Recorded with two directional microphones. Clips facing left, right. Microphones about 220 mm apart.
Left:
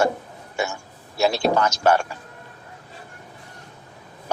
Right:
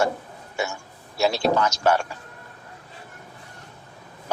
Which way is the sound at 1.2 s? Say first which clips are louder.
Left 1 dB; 50° left (ahead or behind).